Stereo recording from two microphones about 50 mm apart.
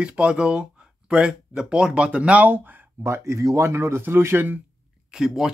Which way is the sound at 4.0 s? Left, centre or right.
Right.